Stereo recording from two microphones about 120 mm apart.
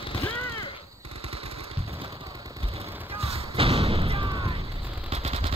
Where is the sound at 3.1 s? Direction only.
55° right (ahead or behind).